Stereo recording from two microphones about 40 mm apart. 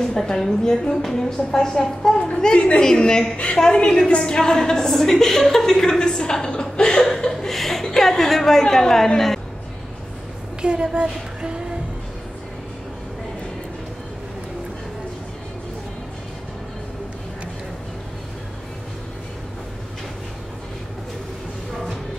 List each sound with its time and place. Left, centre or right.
0.3 s a woman's voice: centre
7.2 s chuckle: centre
10.6 s a sound: right